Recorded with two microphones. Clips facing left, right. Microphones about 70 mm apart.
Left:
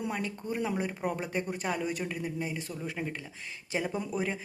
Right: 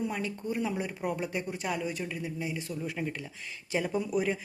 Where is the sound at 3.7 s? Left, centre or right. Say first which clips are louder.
Right 1 dB; centre.